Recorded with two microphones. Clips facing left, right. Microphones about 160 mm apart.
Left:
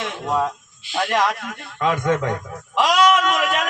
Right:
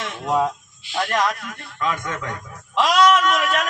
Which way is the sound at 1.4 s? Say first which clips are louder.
Left 3 dB; 55° left (ahead or behind).